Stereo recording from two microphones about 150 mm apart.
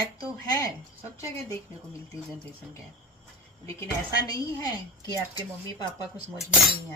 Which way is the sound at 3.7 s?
25° left (ahead or behind).